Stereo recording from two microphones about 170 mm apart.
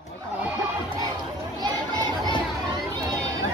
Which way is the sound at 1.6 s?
25° right (ahead or behind).